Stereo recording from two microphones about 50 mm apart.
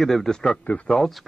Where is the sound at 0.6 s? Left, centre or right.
Left.